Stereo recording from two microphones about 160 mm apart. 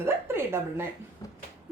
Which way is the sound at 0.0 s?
15° right (ahead or behind).